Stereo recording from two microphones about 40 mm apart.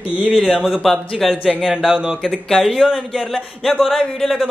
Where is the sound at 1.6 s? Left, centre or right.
Centre.